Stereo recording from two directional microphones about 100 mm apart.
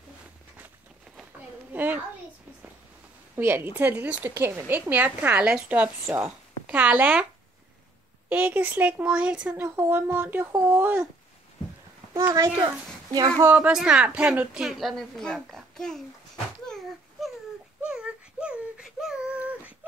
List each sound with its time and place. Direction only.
1.7 s a child's voice: 20° right (ahead or behind)
3.3 s a woman's voice: 20° right (ahead or behind)
6.0 s speech: 25° right (ahead or behind)
6.7 s a woman's voice: 15° right (ahead or behind)
8.3 s a woman's voice: 20° right (ahead or behind)
9.6 s speech: 25° right (ahead or behind)
12.1 s a child's voice: 30° right (ahead or behind)
13.7 s a woman's voice: 5° right (ahead or behind)
16.6 s a sound: 5° left (ahead or behind)
17.8 s a sound: 10° right (ahead or behind)